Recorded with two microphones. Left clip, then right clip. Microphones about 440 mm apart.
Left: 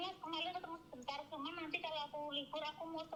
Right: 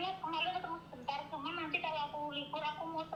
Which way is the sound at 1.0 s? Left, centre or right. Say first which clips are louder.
Right 5 dB; left.